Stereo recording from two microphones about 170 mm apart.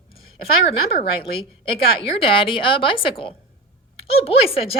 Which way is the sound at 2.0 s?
30° left (ahead or behind).